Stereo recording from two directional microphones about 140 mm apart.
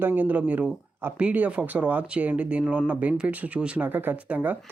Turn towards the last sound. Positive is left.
turn(degrees=-10)  # may be behind; listen again after turning